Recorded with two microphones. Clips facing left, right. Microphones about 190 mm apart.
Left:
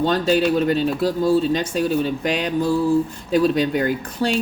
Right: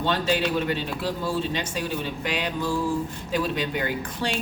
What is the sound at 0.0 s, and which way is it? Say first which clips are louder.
A man's voice: left 6 dB; 40° left (ahead or behind).